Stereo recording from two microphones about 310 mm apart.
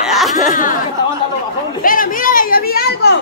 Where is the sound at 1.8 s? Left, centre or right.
Left.